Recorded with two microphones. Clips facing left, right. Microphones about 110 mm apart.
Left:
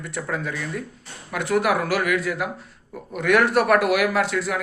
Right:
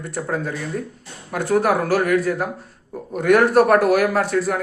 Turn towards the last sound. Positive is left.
turn(degrees=-45)  # may be behind; listen again after turning